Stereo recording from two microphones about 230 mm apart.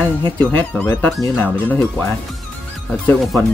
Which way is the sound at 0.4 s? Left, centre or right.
Centre.